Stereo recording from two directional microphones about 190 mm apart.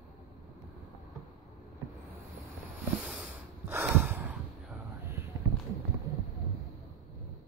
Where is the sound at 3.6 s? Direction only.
10° right (ahead or behind).